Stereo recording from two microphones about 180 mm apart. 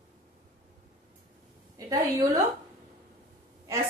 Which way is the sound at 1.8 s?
20° right (ahead or behind).